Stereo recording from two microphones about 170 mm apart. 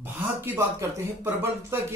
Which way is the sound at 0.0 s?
10° right (ahead or behind).